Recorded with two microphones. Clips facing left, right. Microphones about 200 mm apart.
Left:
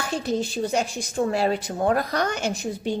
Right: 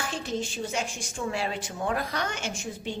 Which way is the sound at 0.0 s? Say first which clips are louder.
Left 6 dB; 40° left (ahead or behind).